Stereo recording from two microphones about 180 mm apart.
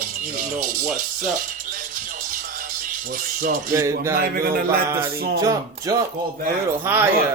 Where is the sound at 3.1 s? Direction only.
50° right (ahead or behind).